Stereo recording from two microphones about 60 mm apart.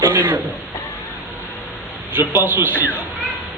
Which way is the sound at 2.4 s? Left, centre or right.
Right.